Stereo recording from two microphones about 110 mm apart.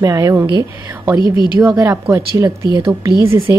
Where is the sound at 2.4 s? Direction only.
35° right (ahead or behind).